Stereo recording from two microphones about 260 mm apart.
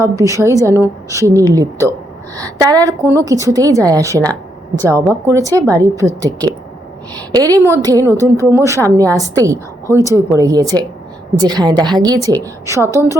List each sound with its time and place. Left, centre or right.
0.0 s a woman's voice: centre
7.3 s a woman's voice: centre
12.2 s a woman's voice: centre
12.6 s a woman's voice: centre